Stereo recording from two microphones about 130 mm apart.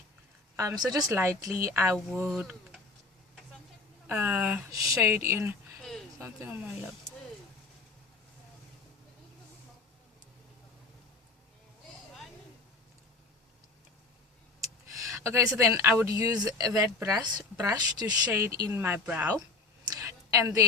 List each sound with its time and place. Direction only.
0.5 s speech: 25° right (ahead or behind)
4.2 s speech: 10° right (ahead or behind)
14.9 s speech: 20° right (ahead or behind)
18.3 s speech: 20° right (ahead or behind)
19.9 s a sound: 25° right (ahead or behind)